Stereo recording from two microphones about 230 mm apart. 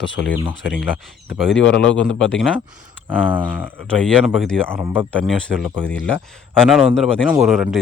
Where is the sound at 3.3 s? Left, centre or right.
Centre.